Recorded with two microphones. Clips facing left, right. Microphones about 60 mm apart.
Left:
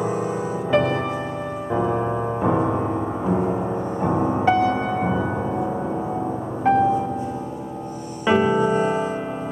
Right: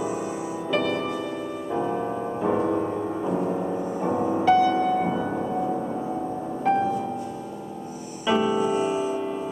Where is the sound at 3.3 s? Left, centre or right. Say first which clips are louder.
Left 5 dB; left.